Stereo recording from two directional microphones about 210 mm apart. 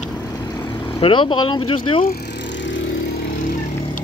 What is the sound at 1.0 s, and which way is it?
Speech, 25° left (ahead or behind).